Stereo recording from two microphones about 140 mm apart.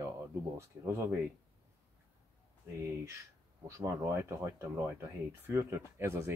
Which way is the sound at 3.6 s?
20° right (ahead or behind).